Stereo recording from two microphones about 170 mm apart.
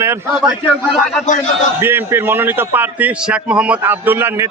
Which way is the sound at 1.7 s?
15° right (ahead or behind).